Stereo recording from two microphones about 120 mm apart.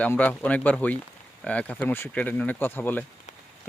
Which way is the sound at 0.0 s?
15° left (ahead or behind).